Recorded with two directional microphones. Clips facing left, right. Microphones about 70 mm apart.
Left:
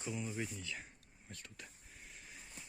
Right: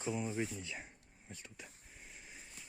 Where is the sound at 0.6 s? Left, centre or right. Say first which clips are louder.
Even; centre.